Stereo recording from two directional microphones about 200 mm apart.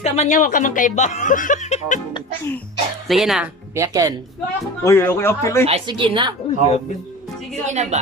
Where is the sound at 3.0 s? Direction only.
Centre (ahead or behind).